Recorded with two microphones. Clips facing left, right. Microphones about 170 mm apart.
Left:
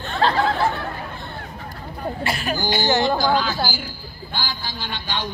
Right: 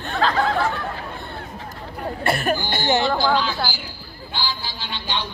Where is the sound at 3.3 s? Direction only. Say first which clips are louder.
Left 1 dB; 45° left (ahead or behind).